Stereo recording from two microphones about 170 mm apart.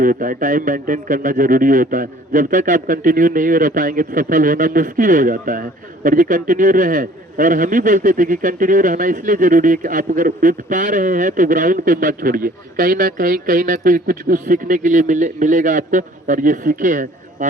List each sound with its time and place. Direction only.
0.0 s a man's voice: 55° right (ahead or behind)